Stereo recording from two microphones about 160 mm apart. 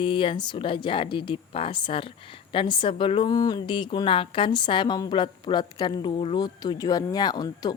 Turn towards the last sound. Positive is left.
turn(degrees=25)  # may be behind; listen again after turning